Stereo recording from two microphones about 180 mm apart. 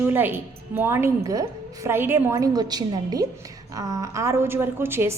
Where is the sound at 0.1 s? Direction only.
10° right (ahead or behind).